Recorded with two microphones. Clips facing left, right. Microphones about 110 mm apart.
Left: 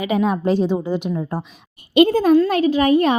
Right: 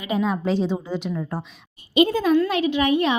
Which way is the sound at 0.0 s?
65° left (ahead or behind).